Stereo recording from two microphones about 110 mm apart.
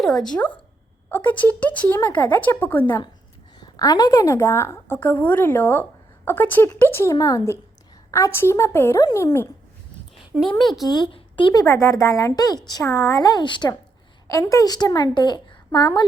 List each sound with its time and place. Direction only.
0.0 s speech: 5° left (ahead or behind)
1.1 s speech: 15° left (ahead or behind)
3.6 s a woman's voice: 35° left (ahead or behind)
10.3 s speech: 5° right (ahead or behind)
10.8 s a woman's voice: 40° left (ahead or behind)
11.1 s a sound: 50° left (ahead or behind)
11.5 s a woman's voice: 25° left (ahead or behind); by 13.7 s 45° left (ahead or behind)
14.3 s a woman's voice: 30° left (ahead or behind)